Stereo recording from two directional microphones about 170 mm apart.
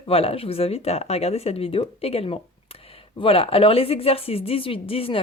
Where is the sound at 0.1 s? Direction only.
35° left (ahead or behind).